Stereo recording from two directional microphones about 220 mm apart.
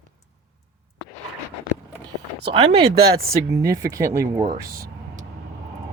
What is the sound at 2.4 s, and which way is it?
Speech, 25° right (ahead or behind).